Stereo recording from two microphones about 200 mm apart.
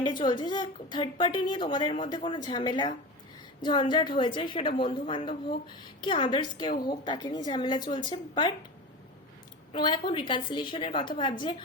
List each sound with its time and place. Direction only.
0.0 s a woman's voice: 25° left (ahead or behind)
9.7 s a woman's voice: 25° left (ahead or behind)